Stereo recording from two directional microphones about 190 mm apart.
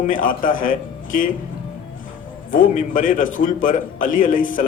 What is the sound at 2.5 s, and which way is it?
A man's voice, 45° left (ahead or behind).